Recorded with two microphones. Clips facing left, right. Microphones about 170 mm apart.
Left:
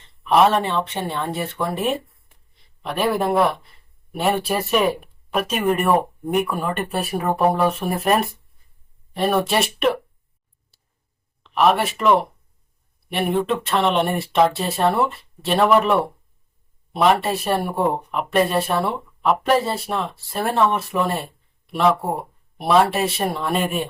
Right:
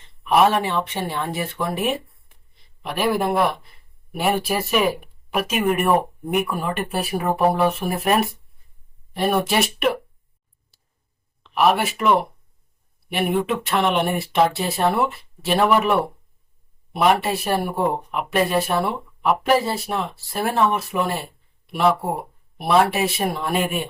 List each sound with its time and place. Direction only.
0.3 s speech: 10° right (ahead or behind)
11.4 s speech: 5° right (ahead or behind)